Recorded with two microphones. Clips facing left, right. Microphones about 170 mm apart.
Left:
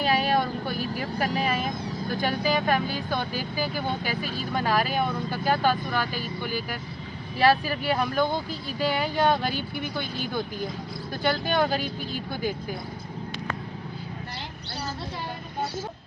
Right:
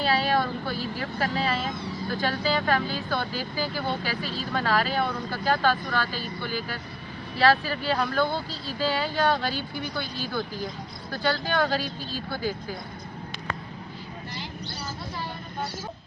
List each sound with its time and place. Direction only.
0.0 s vehicle: 15° left (ahead or behind)
2.2 s speech: 15° left (ahead or behind)